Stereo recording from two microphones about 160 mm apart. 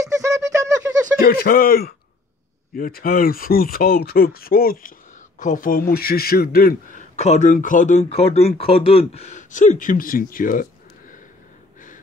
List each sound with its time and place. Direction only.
0.0 s a sound: 20° right (ahead or behind)
1.2 s speech: 65° left (ahead or behind)
5.4 s speech: 55° left (ahead or behind); by 6.7 s 70° left (ahead or behind)
7.0 s speech: 45° left (ahead or behind)